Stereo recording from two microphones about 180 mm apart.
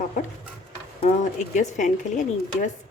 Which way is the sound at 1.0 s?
40° left (ahead or behind).